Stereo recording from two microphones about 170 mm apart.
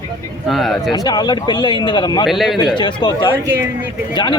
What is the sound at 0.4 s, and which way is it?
Speech, centre (ahead or behind).